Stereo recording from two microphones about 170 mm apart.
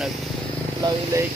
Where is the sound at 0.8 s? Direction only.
25° right (ahead or behind).